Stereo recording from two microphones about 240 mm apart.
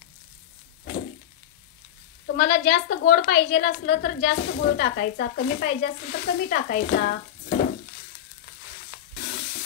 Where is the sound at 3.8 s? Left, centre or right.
Left.